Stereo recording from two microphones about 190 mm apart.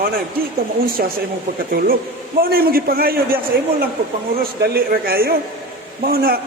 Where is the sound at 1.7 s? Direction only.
50° right (ahead or behind).